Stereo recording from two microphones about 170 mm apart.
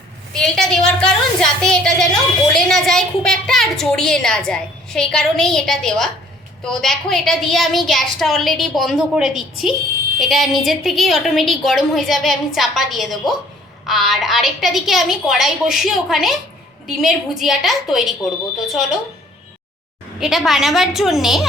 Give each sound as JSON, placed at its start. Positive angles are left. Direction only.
{"t": 0.3, "sound": "a woman's voice", "side_deg": 5}
{"t": 20.1, "sound": "a woman's voice", "side_deg": 0}